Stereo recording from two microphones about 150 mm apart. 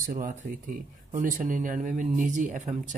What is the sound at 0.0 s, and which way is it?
Speech, 70° right (ahead or behind).